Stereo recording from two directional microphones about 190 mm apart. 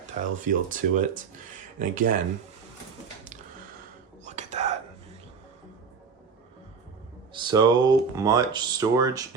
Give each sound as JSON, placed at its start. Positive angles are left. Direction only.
{"t": 0.4, "sound": "speech", "side_deg": -45}
{"t": 4.3, "sound": "whispering", "side_deg": -35}
{"t": 7.3, "sound": "speech", "side_deg": -20}